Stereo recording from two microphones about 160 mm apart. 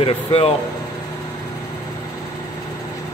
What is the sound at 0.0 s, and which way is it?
Speech, 35° left (ahead or behind).